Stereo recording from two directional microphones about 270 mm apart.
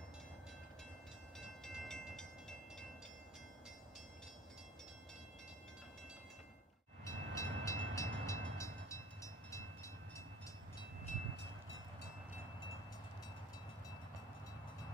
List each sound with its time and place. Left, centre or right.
1.6 s train: centre
7.1 s train: centre
11.1 s train: left